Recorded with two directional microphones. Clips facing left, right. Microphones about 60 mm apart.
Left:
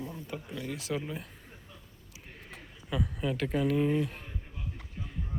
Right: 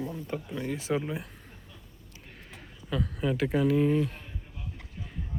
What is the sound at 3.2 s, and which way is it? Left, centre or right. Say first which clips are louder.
Speech: right 4 dB; centre.